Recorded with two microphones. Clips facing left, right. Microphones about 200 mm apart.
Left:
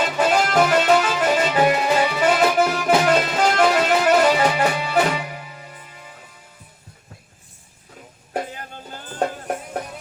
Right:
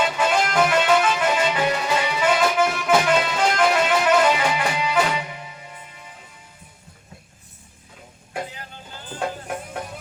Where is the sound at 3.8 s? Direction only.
40° left (ahead or behind).